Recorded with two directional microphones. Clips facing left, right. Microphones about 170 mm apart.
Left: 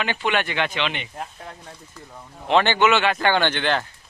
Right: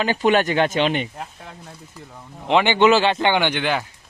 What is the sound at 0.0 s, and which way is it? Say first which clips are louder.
Speech: right 6 dB; 40° right (ahead or behind).